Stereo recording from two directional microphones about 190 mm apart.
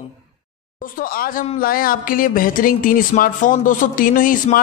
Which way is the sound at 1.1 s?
50° left (ahead or behind).